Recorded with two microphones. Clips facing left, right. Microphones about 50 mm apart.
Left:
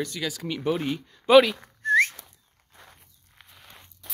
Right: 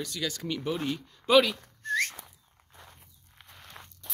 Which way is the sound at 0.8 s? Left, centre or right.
Left.